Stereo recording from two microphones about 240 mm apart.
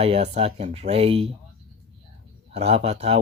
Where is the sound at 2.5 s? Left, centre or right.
Right.